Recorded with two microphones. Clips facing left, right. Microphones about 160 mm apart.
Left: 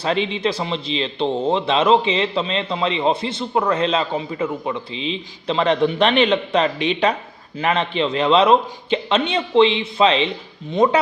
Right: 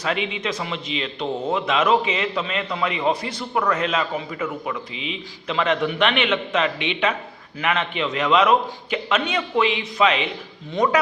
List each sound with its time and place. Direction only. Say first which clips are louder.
0.0 s a man's voice: left 5 dB; 30° left (ahead or behind)